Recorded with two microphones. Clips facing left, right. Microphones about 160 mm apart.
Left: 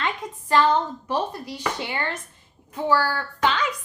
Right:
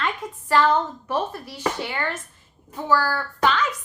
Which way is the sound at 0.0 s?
20° left (ahead or behind).